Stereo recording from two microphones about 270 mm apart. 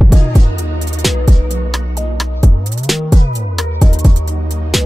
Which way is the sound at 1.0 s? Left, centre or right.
Centre.